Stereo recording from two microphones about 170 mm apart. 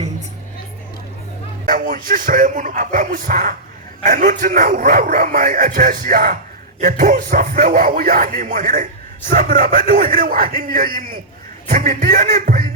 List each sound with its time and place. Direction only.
1.6 s a man's voice: 50° right (ahead or behind)